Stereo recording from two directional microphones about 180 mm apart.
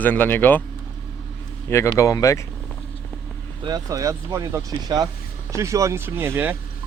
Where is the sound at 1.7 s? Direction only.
15° left (ahead or behind).